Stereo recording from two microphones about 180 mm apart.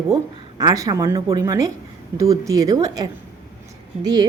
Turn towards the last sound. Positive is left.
turn(degrees=-25)  # may be behind; listen again after turning